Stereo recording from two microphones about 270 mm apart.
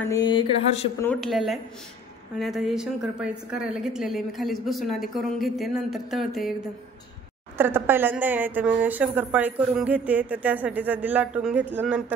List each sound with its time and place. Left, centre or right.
0.1 s speech: centre
1.0 s a woman's voice: centre
7.5 s a woman's voice: centre